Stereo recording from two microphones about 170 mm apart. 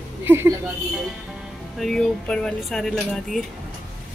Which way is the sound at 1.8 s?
5° left (ahead or behind).